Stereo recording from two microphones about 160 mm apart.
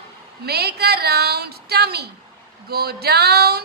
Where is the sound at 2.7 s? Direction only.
75° right (ahead or behind).